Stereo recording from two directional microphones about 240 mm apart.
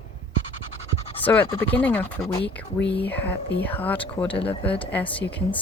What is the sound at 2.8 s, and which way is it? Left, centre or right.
Speech, left.